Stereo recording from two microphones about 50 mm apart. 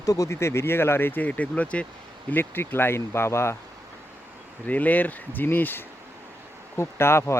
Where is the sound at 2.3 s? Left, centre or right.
Left.